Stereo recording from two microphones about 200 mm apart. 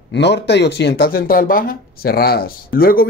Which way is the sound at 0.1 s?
60° left (ahead or behind).